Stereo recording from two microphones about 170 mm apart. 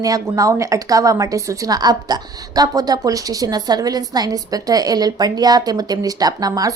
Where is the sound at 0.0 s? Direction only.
20° right (ahead or behind).